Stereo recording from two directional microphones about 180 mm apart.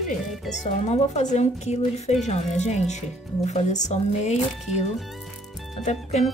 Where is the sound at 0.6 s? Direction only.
40° left (ahead or behind).